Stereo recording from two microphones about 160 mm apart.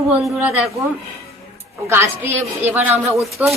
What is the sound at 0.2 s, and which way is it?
Speech, 10° right (ahead or behind).